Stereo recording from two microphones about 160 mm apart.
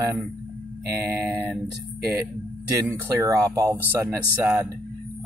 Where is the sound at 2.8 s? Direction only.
20° right (ahead or behind).